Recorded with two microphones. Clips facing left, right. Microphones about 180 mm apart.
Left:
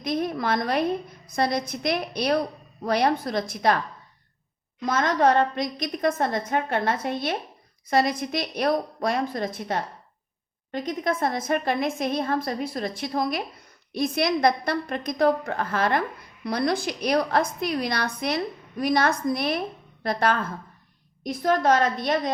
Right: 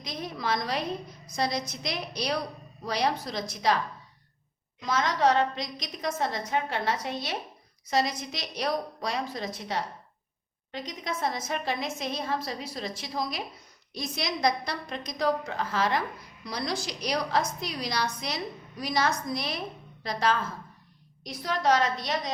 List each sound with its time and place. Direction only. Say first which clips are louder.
0.0 s a woman's voice: left 8 dB; 55° left (ahead or behind)
4.8 s a woman's voice: left 4 dB; 55° left (ahead or behind)